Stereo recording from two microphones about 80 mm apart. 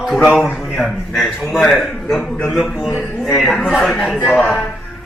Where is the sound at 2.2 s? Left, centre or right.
Centre.